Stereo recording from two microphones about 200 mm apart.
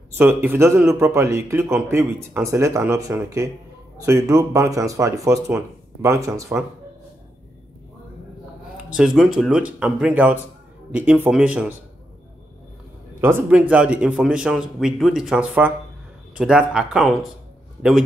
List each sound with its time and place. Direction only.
0.2 s a man's voice: 10° right (ahead or behind)
8.9 s a man's voice: centre (ahead or behind)
13.2 s a man's voice: 10° right (ahead or behind)